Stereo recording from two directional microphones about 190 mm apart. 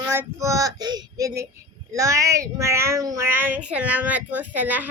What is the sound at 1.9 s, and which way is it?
Speech, 15° right (ahead or behind).